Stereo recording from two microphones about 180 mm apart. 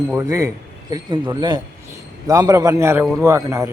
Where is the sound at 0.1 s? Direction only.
15° right (ahead or behind).